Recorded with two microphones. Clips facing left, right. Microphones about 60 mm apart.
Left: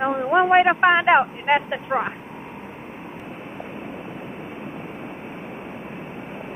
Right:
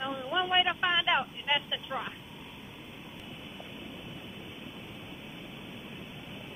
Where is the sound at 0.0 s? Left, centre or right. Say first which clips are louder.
Left 13 dB; left.